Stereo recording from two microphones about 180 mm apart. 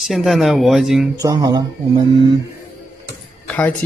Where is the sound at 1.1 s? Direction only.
20° right (ahead or behind).